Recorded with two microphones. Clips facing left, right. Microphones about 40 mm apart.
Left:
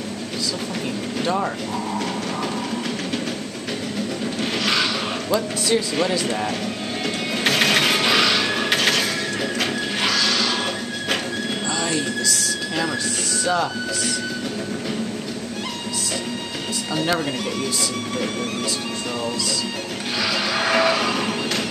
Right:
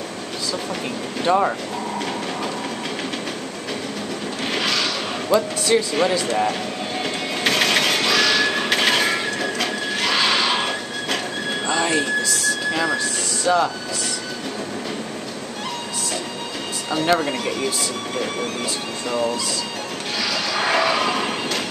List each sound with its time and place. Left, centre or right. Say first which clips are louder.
1.2 s speech: right 5 dB; centre
5.3 s speech: right 3 dB; centre
7.4 s music: even; centre
8.7 s music: right 2 dB; right
9.4 s printer: even; centre
10.1 s a sound: right 5 dB; right
11.7 s a sound: right 5 dB; right
13.4 s speech: right 3 dB; centre
16.9 s speech: right 3 dB; centre
20.6 s a sound: even; centre